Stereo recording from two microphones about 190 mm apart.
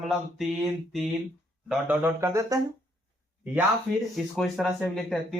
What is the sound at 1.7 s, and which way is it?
Speech, 10° right (ahead or behind).